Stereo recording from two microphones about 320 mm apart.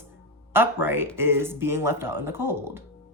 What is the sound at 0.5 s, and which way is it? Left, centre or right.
Speech, centre.